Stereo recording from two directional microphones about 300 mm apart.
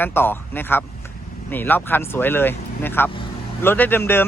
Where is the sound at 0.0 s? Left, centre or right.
Centre.